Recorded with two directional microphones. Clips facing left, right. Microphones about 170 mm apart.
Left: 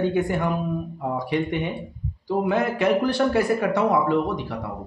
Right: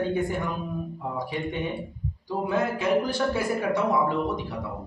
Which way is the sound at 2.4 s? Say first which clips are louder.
Left 3 dB; 70° left (ahead or behind).